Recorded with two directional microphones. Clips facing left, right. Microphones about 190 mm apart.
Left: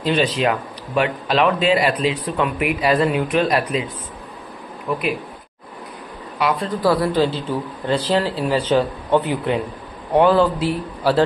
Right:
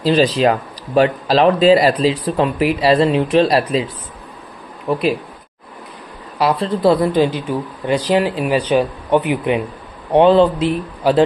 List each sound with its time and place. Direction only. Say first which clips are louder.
0.0 s speech: right 5 dB; 35° right (ahead or behind)
6.3 s a man's voice: right 4 dB; 35° right (ahead or behind); by 11.2 s 20° right (ahead or behind)